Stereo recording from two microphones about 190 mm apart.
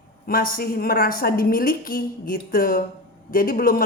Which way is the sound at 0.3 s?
50° left (ahead or behind).